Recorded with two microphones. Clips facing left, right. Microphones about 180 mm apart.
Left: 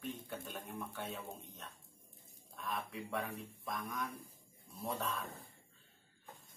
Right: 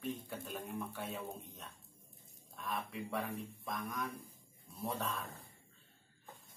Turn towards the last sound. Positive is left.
turn(degrees=0)  # may be behind; listen again after turning